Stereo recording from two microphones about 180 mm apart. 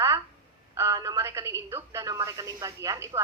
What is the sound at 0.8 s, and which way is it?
Speech, 20° right (ahead or behind).